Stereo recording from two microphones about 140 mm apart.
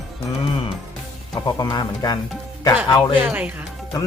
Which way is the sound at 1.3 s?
25° left (ahead or behind).